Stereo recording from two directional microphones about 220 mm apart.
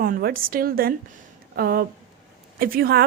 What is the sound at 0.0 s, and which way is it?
A woman's voice, 45° right (ahead or behind).